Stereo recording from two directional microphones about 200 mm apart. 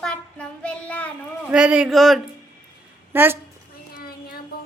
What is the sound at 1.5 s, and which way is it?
Speech, 5° right (ahead or behind).